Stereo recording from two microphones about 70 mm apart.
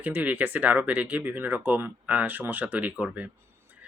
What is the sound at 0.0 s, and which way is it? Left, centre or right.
Speech, right.